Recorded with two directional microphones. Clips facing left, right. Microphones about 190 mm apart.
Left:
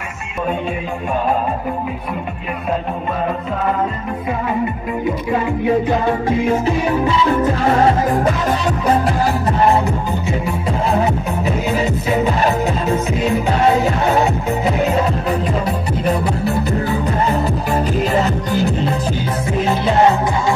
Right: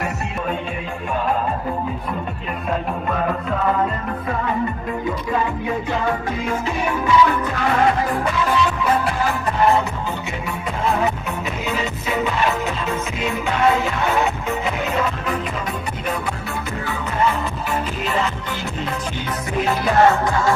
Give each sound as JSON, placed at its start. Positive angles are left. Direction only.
{"t": 6.2, "sound": "music", "side_deg": 35}
{"t": 11.4, "sound": "music", "side_deg": 35}
{"t": 19.6, "sound": "music", "side_deg": 20}